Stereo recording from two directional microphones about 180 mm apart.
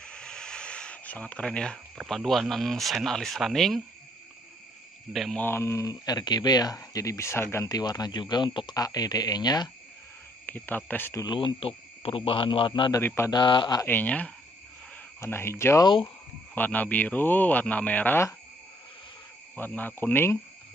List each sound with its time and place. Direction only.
0.0 s a sound: 5° left (ahead or behind)
2.0 s speech: centre (ahead or behind)
5.1 s speech: centre (ahead or behind); by 9.7 s 20° left (ahead or behind)
10.4 s speech: 10° left (ahead or behind)
11.2 s speech: 30° left (ahead or behind)
13.0 s speech: 15° left (ahead or behind)
13.8 s speech: 10° left (ahead or behind)
19.5 s speech: 10° left (ahead or behind)